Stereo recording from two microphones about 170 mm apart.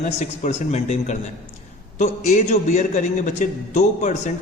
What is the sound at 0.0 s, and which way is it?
A man's voice, 45° left (ahead or behind).